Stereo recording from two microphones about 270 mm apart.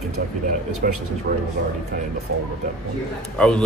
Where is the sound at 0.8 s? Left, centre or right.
Right.